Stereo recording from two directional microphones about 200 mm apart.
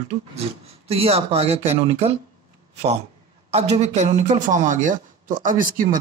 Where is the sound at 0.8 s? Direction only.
30° right (ahead or behind).